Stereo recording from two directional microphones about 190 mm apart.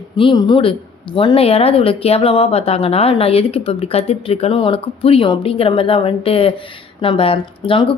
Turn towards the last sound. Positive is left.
turn(degrees=25)  # may be behind; listen again after turning